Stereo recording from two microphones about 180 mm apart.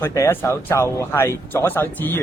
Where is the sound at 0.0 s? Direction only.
15° left (ahead or behind).